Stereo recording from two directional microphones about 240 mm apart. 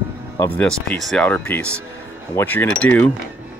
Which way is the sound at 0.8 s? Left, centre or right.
Centre.